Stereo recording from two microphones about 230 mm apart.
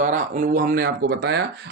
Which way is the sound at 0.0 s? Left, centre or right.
Right.